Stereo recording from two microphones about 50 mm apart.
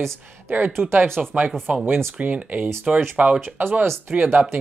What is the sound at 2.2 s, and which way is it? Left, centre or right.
Speech, right.